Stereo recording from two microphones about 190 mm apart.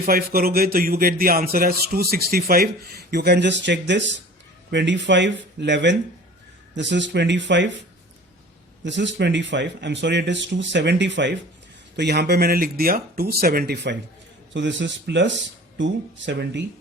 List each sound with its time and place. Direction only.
0.0 s speech: 50° right (ahead or behind); by 7.7 s 70° right (ahead or behind)
8.8 s speech: 70° right (ahead or behind)
14.5 s speech: 75° right (ahead or behind)